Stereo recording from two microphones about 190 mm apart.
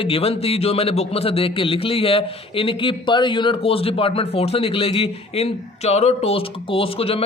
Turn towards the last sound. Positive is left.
turn(degrees=30)  # may be behind; listen again after turning